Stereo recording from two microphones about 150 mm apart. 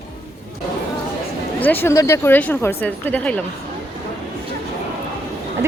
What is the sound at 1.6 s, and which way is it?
Speech, 10° left (ahead or behind).